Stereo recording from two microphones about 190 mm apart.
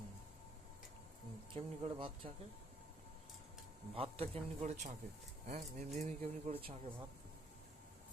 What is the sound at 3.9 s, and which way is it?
Speech, 30° right (ahead or behind).